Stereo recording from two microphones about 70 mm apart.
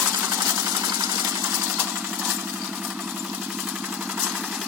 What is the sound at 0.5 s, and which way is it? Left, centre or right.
Engine, right.